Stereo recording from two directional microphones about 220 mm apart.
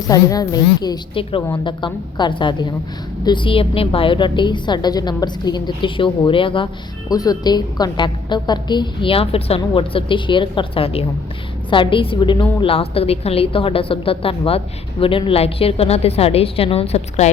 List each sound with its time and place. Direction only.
0.1 s a woman's voice: 15° left (ahead or behind)